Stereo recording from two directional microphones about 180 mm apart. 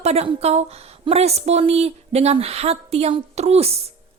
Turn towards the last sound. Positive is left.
turn(degrees=-35)  # may be behind; listen again after turning